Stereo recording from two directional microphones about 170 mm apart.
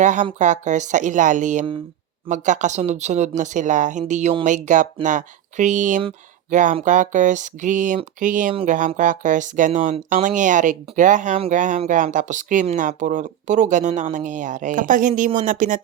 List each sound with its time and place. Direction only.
0.0 s speech: 45° right (ahead or behind)